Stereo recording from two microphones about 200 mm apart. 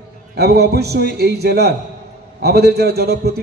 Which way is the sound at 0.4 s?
55° right (ahead or behind).